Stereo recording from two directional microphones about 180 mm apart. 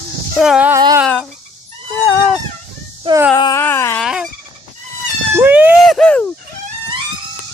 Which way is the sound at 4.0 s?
5° right (ahead or behind).